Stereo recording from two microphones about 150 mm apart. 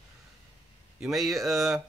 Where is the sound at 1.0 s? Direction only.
Centre (ahead or behind).